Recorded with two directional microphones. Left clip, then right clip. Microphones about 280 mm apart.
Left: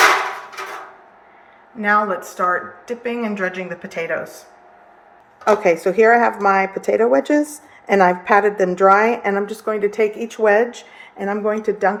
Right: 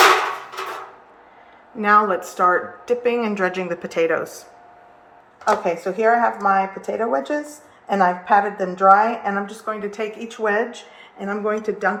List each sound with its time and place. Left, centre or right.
1.8 s speech: centre
5.6 s a woman's voice: left